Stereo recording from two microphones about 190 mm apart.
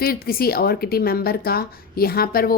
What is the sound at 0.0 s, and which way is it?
A woman's voice, 55° left (ahead or behind).